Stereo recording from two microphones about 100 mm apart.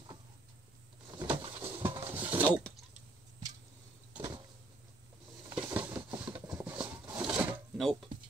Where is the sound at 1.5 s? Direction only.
25° right (ahead or behind).